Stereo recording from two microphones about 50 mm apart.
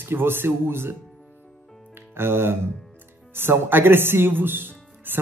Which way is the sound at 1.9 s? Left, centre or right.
Right.